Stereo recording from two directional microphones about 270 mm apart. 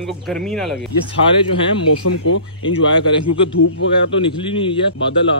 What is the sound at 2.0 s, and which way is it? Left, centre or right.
Speech, left.